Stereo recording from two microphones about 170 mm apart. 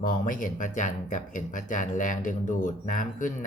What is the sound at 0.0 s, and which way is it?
Speech, 50° left (ahead or behind).